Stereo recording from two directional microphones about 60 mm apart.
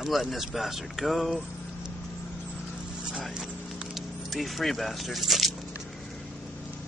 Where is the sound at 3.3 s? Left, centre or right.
Centre.